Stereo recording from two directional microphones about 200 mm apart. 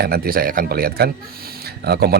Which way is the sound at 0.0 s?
50° right (ahead or behind).